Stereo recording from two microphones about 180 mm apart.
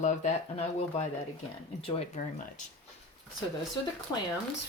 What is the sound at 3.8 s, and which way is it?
Speech, 25° left (ahead or behind).